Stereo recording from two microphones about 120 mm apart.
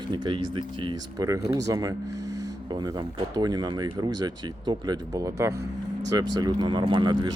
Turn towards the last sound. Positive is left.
turn(degrees=-35)  # may be behind; listen again after turning